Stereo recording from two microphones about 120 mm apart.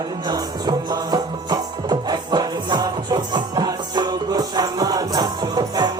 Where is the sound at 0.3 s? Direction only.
35° right (ahead or behind).